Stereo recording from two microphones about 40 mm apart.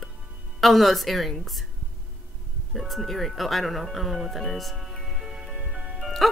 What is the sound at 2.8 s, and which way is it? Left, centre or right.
A woman's voice, centre.